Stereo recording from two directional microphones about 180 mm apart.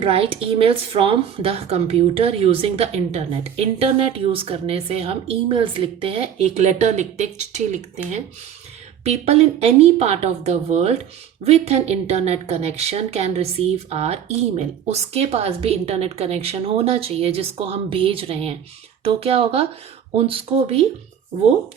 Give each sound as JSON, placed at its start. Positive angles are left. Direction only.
{"t": 0.0, "sound": "speech", "side_deg": -30}